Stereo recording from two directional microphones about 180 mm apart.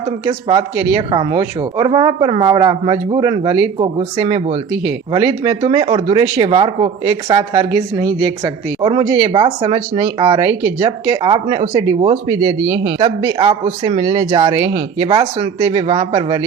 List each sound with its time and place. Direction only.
0.3 s speech: 20° right (ahead or behind)
1.8 s speech: 30° right (ahead or behind)
3.8 s speech: 30° right (ahead or behind)
5.1 s speech: 20° right (ahead or behind)
9.0 s speech: 15° right (ahead or behind)
9.3 s speech: 30° right (ahead or behind)
10.3 s speech: 15° right (ahead or behind)
10.8 s speech: 25° right (ahead or behind)
11.7 s speech: 20° right (ahead or behind)
13.9 s speech: 40° right (ahead or behind)
14.2 s speech: 20° right (ahead or behind)
14.7 s speech: 35° right (ahead or behind)